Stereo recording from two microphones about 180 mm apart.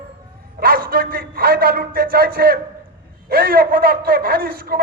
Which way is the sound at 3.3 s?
55° right (ahead or behind).